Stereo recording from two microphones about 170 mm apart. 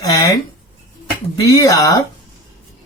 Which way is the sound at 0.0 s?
20° left (ahead or behind).